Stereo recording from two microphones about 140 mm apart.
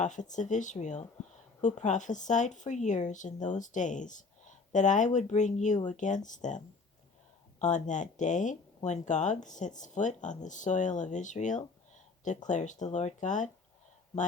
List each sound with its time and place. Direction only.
0.0 s speech: 60° left (ahead or behind)
7.6 s speech: 60° left (ahead or behind)